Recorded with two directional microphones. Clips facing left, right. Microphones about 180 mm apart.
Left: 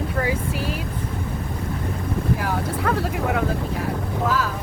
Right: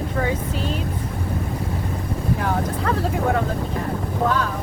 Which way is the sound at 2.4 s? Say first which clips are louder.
Right 1 dB; centre (ahead or behind).